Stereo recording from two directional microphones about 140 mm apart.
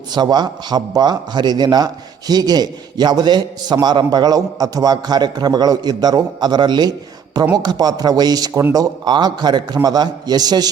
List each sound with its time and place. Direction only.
0.1 s a man's voice: 30° right (ahead or behind)